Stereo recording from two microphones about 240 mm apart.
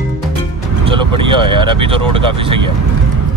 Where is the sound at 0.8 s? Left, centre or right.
Right.